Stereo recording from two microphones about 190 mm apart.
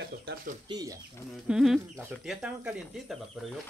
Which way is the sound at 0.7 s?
20° right (ahead or behind).